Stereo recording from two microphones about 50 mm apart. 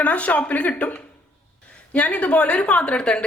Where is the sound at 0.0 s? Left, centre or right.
Left.